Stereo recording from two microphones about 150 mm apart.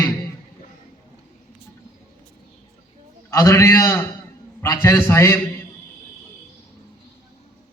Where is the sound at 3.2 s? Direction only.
20° left (ahead or behind).